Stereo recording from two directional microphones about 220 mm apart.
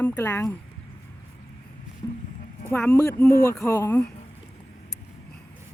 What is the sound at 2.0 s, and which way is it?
Music, 15° left (ahead or behind).